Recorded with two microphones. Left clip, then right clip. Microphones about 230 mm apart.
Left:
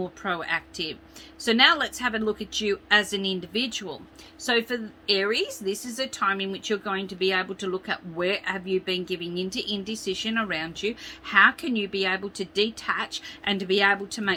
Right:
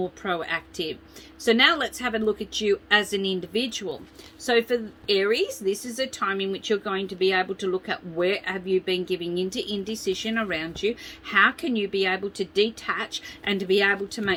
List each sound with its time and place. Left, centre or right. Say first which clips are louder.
0.2 s speech: even; centre